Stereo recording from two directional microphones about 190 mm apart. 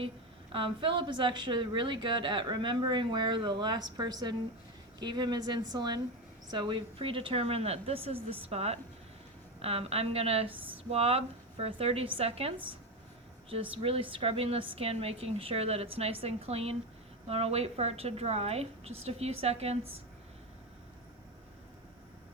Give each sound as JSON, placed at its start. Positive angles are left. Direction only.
{"t": 0.5, "sound": "a woman's voice", "side_deg": -25}